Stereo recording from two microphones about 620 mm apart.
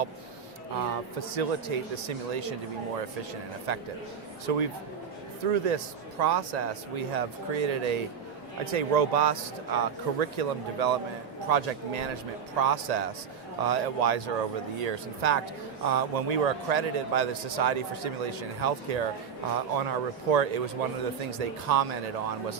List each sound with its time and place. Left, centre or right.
1.4 s a man's voice: right
3.7 s a man's voice: right